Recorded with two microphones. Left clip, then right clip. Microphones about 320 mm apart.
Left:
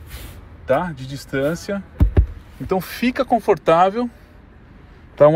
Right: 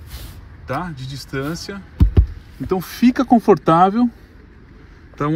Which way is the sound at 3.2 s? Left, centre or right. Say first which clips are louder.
Right 2 dB; centre.